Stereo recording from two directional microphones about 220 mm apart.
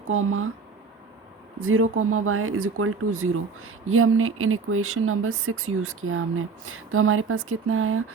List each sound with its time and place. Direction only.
0.1 s speech: 70° right (ahead or behind)
1.6 s speech: 70° right (ahead or behind)